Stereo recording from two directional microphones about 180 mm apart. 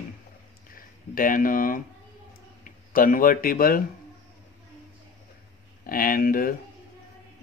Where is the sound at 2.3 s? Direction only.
50° left (ahead or behind).